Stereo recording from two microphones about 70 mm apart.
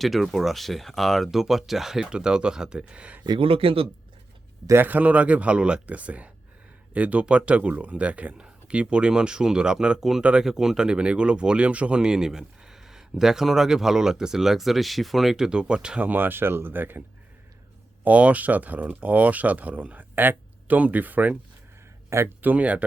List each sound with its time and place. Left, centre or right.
0.0 s speech: centre
4.7 s speech: right
18.0 s speech: centre
22.4 s speech: right